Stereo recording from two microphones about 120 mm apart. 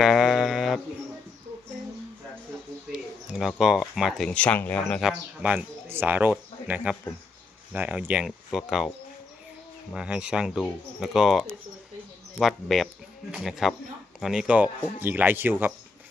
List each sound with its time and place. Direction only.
0.0 s a sound: centre (ahead or behind)
2.9 s speech: 5° right (ahead or behind)
4.3 s speech: 10° left (ahead or behind)
4.9 s speech: 5° right (ahead or behind)
6.3 s a sound: 10° right (ahead or behind)
7.7 s speech: 10° right (ahead or behind)
9.9 s speech: 5° right (ahead or behind)